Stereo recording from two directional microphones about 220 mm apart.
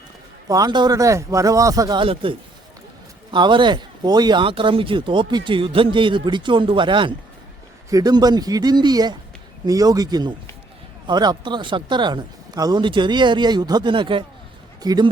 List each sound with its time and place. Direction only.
0.4 s speech: 15° right (ahead or behind)
3.3 s a man's voice: 20° right (ahead or behind)